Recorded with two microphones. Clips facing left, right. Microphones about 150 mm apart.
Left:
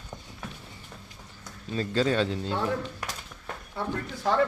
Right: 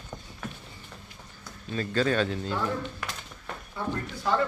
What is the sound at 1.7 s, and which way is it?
Speech, 25° left (ahead or behind).